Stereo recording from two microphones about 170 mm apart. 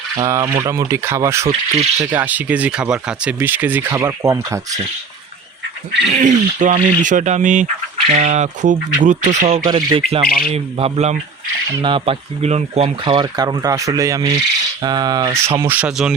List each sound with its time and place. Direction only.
0.2 s speech: 15° right (ahead or behind)
6.1 s speech: 45° right (ahead or behind)
9.5 s speech: 30° right (ahead or behind)
11.7 s speech: 30° right (ahead or behind); by 16.1 s 5° right (ahead or behind)